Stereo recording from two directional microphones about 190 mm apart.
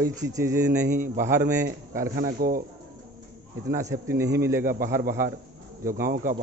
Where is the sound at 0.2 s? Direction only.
15° right (ahead or behind).